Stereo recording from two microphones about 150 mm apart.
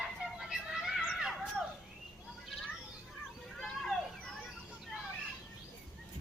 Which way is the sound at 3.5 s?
5° left (ahead or behind).